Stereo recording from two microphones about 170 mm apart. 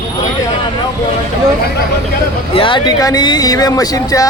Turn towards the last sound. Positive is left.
turn(degrees=20)  # may be behind; listen again after turning